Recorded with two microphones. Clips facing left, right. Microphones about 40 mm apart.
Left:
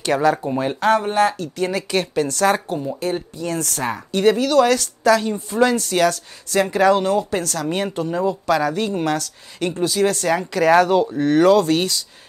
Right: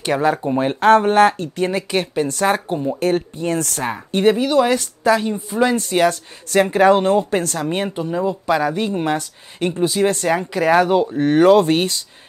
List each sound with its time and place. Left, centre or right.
0.0 s a woman's voice: right
0.7 s speech: right
1.6 s a woman's voice: right
3.0 s speech: right
3.8 s a woman's voice: right
7.9 s speech: centre
8.3 s a woman's voice: right
11.1 s speech: right